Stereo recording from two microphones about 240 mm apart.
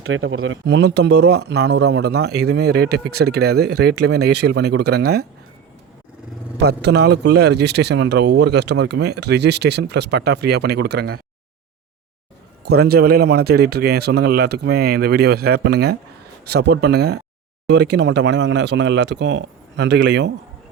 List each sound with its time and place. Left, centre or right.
0.0 s speech: right
6.6 s speech: right
12.6 s speech: right